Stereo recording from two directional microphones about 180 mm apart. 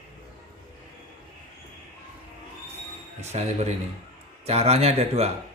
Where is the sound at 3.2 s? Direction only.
40° right (ahead or behind).